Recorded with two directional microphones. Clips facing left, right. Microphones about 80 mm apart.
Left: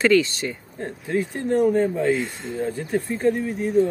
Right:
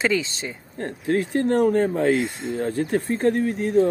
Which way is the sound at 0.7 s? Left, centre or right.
Right.